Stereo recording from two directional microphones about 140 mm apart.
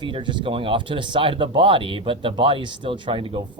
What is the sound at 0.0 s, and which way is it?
Speech, 35° right (ahead or behind).